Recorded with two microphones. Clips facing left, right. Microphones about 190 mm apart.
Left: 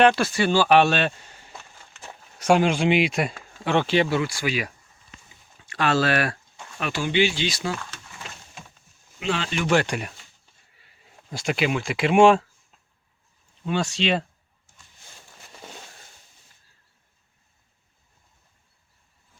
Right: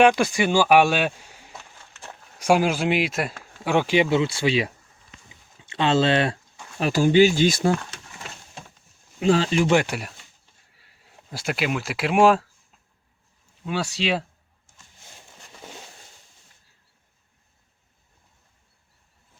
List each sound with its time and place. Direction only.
0.0 s speech: 15° right (ahead or behind)
6.7 s speech: 35° right (ahead or behind)
9.2 s speech: 35° right (ahead or behind)
9.8 s speech: 5° right (ahead or behind)
13.7 s speech: 5° right (ahead or behind)